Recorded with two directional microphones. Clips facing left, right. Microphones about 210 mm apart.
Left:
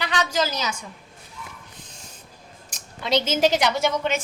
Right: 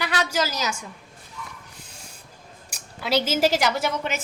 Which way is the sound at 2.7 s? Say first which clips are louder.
Left 1 dB; 5° right (ahead or behind).